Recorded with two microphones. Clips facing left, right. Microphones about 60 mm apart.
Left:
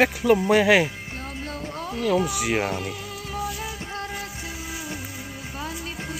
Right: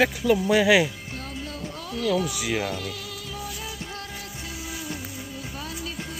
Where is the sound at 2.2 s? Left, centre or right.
Left.